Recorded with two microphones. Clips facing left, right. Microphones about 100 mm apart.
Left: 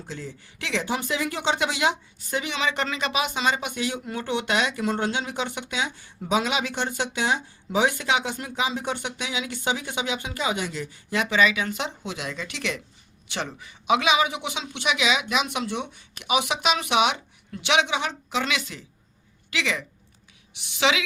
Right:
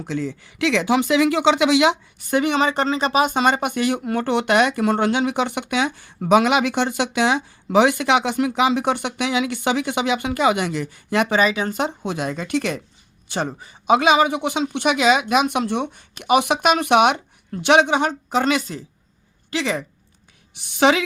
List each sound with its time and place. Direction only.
0.0 s speech: 75° right (ahead or behind)
11.3 s speech: 40° right (ahead or behind)